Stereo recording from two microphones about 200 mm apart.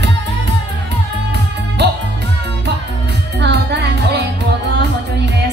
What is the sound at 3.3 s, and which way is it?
Music, 60° right (ahead or behind).